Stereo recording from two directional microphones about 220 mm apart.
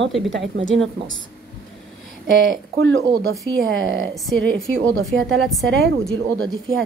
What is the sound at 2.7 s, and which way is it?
A woman's voice, 55° right (ahead or behind).